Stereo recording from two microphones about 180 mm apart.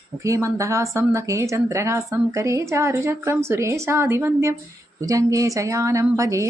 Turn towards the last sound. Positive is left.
turn(degrees=-15)  # may be behind; listen again after turning